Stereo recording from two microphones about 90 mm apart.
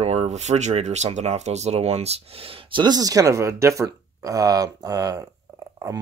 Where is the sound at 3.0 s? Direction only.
40° right (ahead or behind).